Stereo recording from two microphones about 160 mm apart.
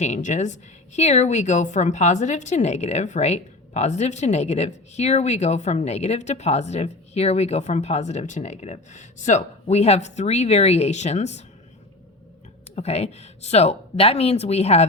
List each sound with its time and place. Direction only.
0.0 s a woman's voice: 50° left (ahead or behind)
12.7 s speech: 40° left (ahead or behind)